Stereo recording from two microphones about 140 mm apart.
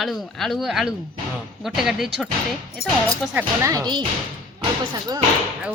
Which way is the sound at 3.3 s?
25° right (ahead or behind).